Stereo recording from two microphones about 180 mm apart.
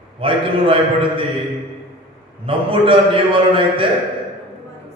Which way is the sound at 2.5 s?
30° right (ahead or behind).